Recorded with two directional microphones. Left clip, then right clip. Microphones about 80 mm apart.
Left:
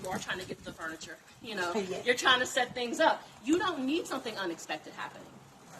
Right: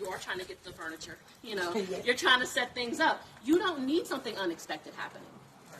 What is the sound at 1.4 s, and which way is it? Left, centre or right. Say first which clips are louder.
A woman's voice: even; left.